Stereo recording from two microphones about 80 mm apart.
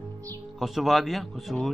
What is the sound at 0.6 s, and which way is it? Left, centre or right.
Speech, centre.